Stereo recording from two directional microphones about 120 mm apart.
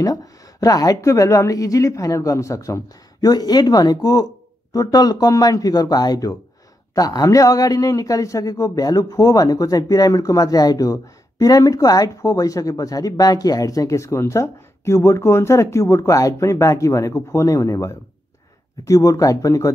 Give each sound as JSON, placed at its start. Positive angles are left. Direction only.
{"t": 0.0, "sound": "a man's voice", "side_deg": 30}